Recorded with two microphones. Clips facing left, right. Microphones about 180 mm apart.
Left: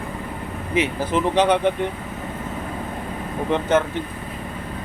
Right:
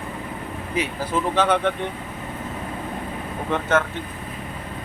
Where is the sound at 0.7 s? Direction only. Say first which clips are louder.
Left 4 dB; 20° left (ahead or behind).